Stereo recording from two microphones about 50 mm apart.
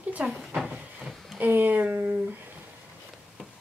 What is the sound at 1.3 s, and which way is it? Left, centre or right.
Speech, right.